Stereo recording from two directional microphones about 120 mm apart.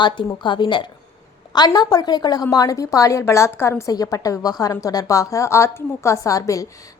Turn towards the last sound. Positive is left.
turn(degrees=25)  # may be behind; listen again after turning